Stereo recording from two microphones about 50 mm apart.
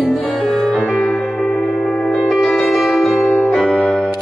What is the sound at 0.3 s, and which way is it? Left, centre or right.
Music, centre.